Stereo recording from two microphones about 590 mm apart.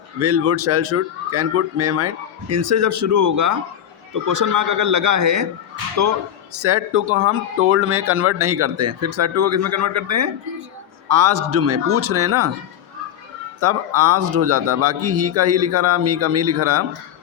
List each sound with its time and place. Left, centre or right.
0.2 s speech: right
13.6 s speech: right